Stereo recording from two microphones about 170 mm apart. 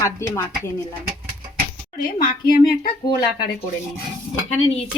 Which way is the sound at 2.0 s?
55° left (ahead or behind).